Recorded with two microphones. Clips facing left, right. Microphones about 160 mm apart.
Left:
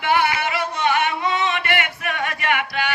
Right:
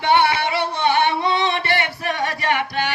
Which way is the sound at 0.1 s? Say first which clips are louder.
Right 3 dB; 30° right (ahead or behind).